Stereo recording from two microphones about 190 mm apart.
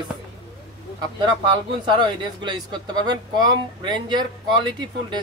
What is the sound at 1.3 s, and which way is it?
Speech, 25° right (ahead or behind).